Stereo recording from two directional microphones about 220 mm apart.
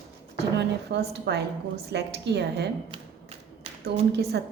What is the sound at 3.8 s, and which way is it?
Speech, 50° right (ahead or behind).